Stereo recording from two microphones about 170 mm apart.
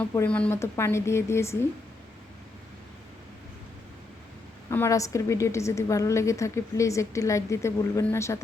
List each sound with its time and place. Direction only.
0.0 s a woman's voice: 10° left (ahead or behind)
4.7 s a woman's voice: 15° left (ahead or behind)